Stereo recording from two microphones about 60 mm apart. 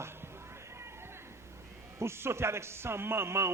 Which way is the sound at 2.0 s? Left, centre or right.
Right.